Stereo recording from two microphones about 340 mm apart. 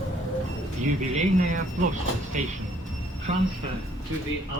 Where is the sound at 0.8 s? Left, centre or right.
Right.